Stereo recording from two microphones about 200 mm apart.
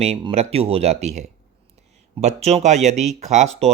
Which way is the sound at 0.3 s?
30° right (ahead or behind).